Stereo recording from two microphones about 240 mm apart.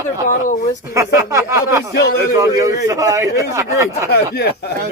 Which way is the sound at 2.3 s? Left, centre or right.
Centre.